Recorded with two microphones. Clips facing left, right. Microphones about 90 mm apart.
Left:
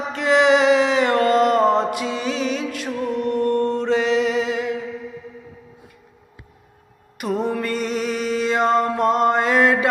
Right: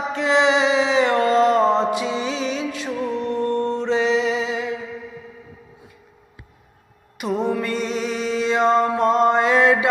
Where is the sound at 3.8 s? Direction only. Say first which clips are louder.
Left 1 dB; 50° left (ahead or behind).